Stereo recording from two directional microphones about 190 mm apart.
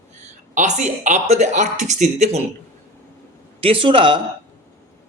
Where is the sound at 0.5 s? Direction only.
40° right (ahead or behind).